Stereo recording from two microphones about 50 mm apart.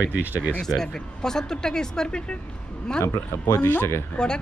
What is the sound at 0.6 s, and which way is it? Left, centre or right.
Speech, centre.